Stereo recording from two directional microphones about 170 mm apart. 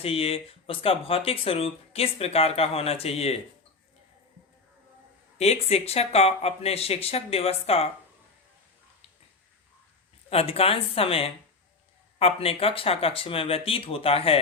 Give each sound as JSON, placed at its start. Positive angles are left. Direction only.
{"t": 0.0, "sound": "speech", "side_deg": 35}
{"t": 5.4, "sound": "speech", "side_deg": 35}
{"t": 10.2, "sound": "speech", "side_deg": 35}